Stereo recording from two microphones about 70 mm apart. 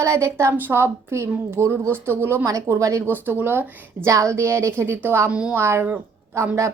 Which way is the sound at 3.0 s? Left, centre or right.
Right.